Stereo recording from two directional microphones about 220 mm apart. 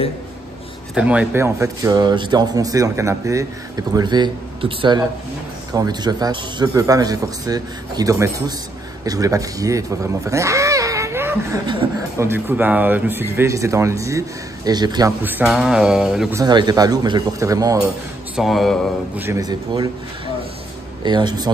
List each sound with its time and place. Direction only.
0.9 s speech: 5° right (ahead or behind)
16.3 s speech: 20° right (ahead or behind)
18.3 s speech: centre (ahead or behind)
19.2 s speech: 15° right (ahead or behind)
21.0 s speech: 20° right (ahead or behind)